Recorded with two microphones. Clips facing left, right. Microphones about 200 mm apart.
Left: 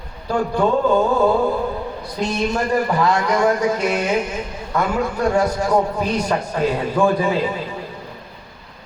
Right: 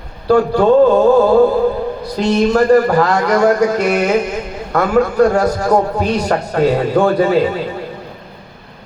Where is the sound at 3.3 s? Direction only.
70° right (ahead or behind).